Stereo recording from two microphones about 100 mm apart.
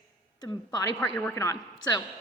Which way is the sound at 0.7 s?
40° left (ahead or behind).